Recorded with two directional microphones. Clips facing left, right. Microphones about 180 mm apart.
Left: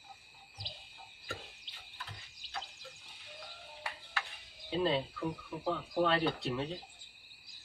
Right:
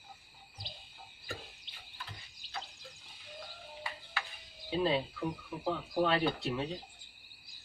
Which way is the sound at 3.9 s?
65° left (ahead or behind).